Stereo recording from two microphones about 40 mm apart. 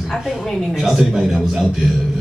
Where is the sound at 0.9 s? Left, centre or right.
Centre.